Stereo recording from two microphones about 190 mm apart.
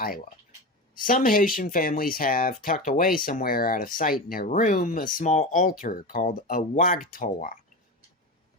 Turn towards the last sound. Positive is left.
turn(degrees=45)  # may be behind; listen again after turning